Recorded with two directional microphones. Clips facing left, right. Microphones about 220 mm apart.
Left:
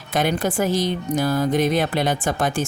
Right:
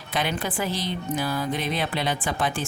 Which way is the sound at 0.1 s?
45° left (ahead or behind).